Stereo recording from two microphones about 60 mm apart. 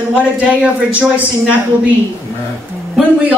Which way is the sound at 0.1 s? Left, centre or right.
Right.